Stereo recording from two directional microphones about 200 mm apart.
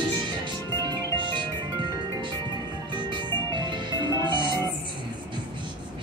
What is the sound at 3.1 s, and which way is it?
Music, 20° right (ahead or behind).